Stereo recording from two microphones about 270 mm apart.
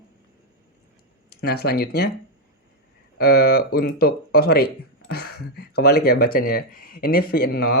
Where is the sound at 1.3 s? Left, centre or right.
Left.